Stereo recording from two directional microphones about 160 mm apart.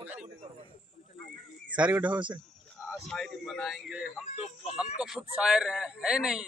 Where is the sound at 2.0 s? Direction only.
30° right (ahead or behind).